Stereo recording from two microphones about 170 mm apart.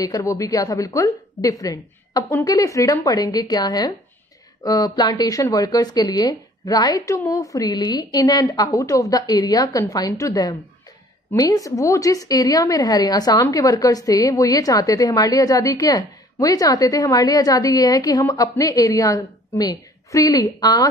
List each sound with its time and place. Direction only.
0.0 s a woman's voice: 20° left (ahead or behind)